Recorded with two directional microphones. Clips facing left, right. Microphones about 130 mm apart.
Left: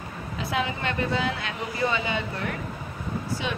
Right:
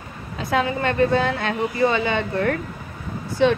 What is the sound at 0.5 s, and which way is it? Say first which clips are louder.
A woman's voice: right 7 dB; 45° right (ahead or behind).